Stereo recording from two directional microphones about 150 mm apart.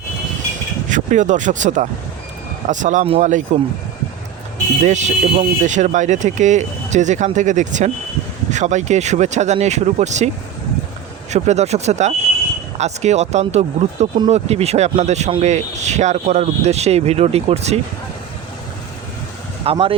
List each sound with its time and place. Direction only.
0.9 s speech: 55° right (ahead or behind)
4.8 s speech: 50° right (ahead or behind)
11.3 s speech: 50° right (ahead or behind)
19.6 s speech: 40° right (ahead or behind)